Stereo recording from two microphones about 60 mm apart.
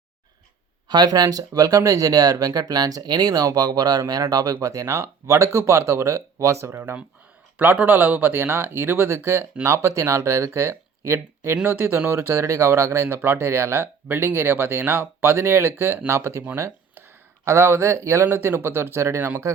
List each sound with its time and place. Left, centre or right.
1.0 s speech: right
7.6 s speech: right
11.6 s speech: right
17.4 s speech: right
18.3 s speech: right